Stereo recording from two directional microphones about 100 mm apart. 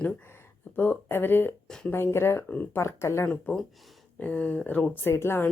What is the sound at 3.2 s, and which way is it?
Speech, 10° left (ahead or behind).